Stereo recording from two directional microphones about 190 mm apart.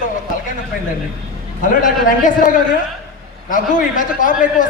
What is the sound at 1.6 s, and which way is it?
Speech, 45° left (ahead or behind).